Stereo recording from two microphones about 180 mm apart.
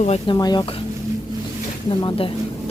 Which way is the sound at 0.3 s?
20° left (ahead or behind).